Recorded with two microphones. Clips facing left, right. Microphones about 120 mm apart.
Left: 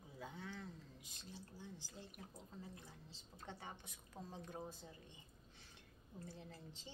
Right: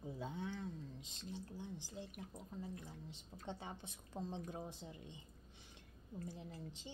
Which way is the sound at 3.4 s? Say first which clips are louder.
Right 4 dB; 25° right (ahead or behind).